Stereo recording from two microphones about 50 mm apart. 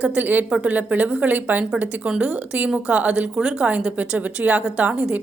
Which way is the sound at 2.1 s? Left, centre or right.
Right.